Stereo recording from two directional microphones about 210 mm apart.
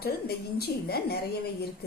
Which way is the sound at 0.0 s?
50° left (ahead or behind).